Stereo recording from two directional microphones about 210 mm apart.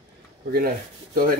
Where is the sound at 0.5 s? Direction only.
45° right (ahead or behind).